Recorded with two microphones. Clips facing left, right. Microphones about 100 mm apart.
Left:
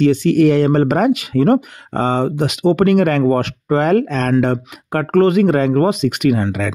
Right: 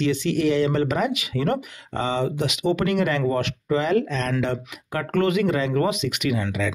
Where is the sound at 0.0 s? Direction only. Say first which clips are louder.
Left 9 dB; 45° left (ahead or behind).